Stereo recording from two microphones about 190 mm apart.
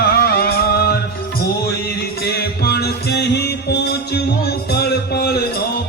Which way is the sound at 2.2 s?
55° left (ahead or behind).